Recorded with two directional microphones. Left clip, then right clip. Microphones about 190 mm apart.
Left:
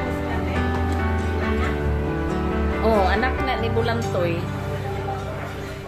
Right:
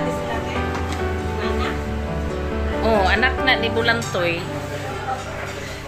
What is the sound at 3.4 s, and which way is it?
Speech, 5° left (ahead or behind).